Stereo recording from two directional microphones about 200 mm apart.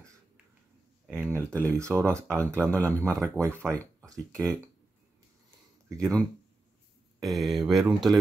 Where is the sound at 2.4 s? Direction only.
10° left (ahead or behind).